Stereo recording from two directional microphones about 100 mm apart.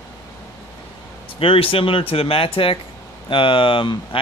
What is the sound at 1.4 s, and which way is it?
Speech, 65° left (ahead or behind).